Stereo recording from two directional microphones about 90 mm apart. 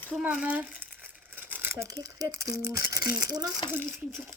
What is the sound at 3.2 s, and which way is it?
Speech, 45° right (ahead or behind).